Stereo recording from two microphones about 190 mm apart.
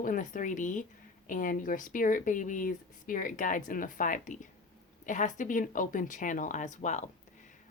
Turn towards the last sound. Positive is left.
turn(degrees=40)  # may be behind; listen again after turning